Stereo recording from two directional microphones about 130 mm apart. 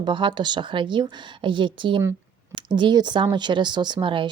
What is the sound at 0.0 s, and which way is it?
A woman's voice, 40° right (ahead or behind).